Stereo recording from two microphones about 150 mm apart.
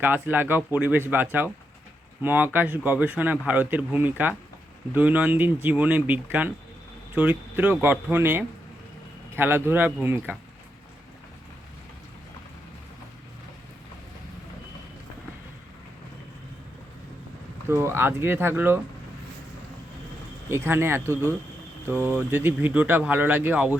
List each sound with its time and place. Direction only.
0.0 s speech: 10° right (ahead or behind)
17.7 s speech: 15° right (ahead or behind)
20.5 s speech: 15° right (ahead or behind)